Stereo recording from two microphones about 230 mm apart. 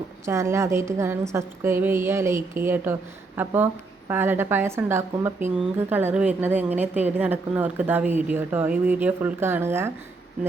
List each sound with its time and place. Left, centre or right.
0.3 s speech: centre